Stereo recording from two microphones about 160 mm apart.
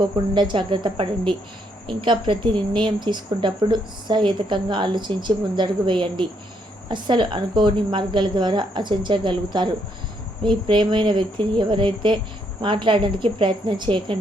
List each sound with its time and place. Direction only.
0.0 s a woman's voice: 30° right (ahead or behind)